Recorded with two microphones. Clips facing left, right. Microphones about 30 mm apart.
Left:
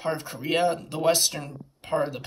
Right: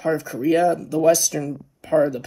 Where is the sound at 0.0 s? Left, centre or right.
Left.